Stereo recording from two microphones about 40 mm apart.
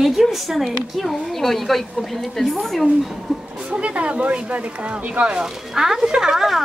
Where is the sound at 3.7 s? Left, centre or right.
Right.